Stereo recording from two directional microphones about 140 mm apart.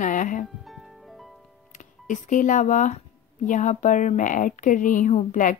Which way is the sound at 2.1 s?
65° left (ahead or behind).